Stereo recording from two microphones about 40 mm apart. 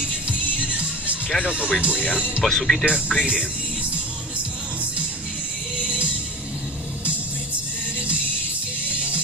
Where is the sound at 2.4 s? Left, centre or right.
Centre.